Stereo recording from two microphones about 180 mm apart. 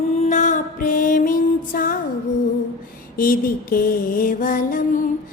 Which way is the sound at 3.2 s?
55° left (ahead or behind).